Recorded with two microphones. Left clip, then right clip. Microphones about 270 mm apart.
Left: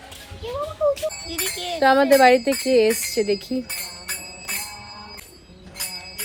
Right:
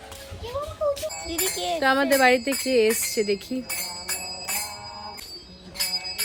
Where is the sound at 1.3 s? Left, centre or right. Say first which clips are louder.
Even; right.